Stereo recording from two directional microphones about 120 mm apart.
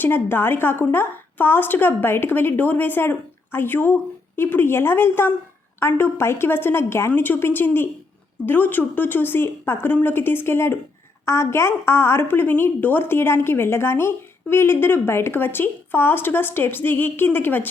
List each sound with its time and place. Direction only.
0.0 s a woman's voice: 15° left (ahead or behind)